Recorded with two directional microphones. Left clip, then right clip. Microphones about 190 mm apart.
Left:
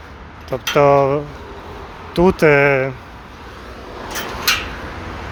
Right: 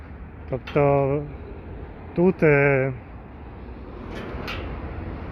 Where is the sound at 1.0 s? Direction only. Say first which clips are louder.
Left 8 dB; 35° left (ahead or behind).